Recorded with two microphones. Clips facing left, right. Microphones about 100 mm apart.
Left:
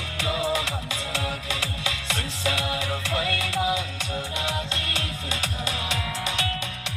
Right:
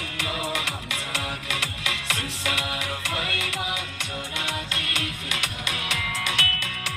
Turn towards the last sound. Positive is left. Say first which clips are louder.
# even
turn(degrees=30)  # may be behind; listen again after turning